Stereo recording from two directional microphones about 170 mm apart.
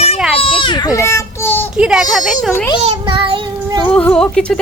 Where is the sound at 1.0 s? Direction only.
15° left (ahead or behind).